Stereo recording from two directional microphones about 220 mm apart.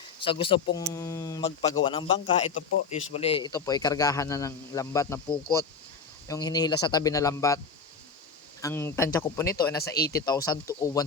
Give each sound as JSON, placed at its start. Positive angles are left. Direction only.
{"t": 0.2, "sound": "speech", "side_deg": 25}
{"t": 8.6, "sound": "speech", "side_deg": 10}